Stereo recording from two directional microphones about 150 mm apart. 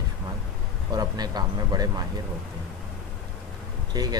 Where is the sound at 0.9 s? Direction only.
25° right (ahead or behind).